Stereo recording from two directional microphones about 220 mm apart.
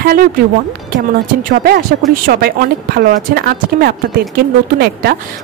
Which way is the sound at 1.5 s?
40° right (ahead or behind).